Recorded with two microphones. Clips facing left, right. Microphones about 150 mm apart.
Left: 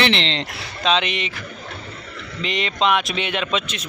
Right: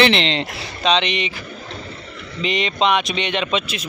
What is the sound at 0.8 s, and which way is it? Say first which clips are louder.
Speech: right 2 dB; 5° left (ahead or behind).